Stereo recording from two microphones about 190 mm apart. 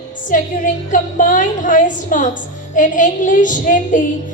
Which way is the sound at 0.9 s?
45° left (ahead or behind).